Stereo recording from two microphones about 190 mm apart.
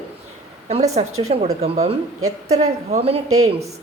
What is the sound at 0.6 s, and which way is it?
Speech, 35° right (ahead or behind).